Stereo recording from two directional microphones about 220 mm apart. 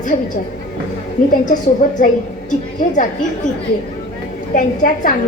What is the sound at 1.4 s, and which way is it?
A woman's voice, 35° left (ahead or behind).